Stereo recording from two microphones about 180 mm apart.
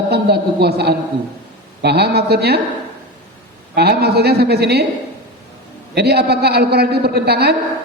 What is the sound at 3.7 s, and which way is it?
A man's voice, 65° right (ahead or behind).